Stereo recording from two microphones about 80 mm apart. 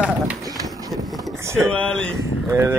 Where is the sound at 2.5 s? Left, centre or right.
Right.